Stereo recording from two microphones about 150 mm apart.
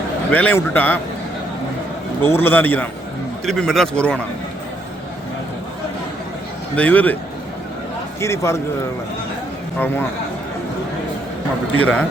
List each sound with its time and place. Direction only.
0.3 s a man's voice: 10° left (ahead or behind)
2.2 s a man's voice: 15° left (ahead or behind)
6.7 s a man's voice: 10° left (ahead or behind)
8.2 s a man's voice: 20° left (ahead or behind)
9.8 s a man's voice: 15° left (ahead or behind)
11.8 s a man's voice: 10° left (ahead or behind)